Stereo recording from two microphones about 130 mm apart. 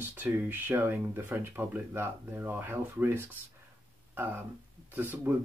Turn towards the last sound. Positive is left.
turn(degrees=-15)  # may be behind; listen again after turning